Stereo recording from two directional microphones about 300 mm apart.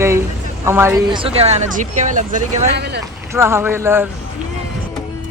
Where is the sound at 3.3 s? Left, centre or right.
Centre.